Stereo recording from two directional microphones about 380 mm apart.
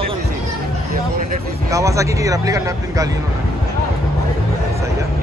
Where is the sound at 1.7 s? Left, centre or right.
Centre.